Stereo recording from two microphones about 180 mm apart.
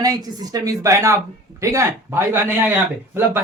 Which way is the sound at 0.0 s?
20° right (ahead or behind).